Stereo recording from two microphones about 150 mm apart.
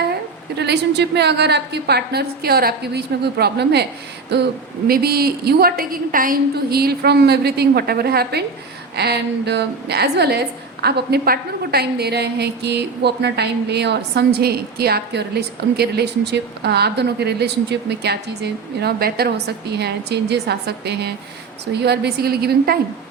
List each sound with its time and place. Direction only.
1.2 s a woman's voice: 90° right